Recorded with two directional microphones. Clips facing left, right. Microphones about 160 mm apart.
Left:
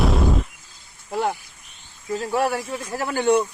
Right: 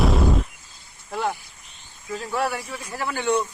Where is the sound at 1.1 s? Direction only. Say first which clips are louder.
Left 3 dB; 20° left (ahead or behind).